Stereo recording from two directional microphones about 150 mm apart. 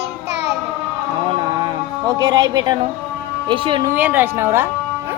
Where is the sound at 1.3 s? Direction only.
30° right (ahead or behind).